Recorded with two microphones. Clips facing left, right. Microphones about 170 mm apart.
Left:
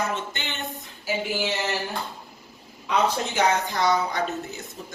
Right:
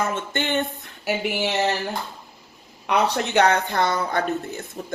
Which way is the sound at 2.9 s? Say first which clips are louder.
Right 3 dB; 65° right (ahead or behind).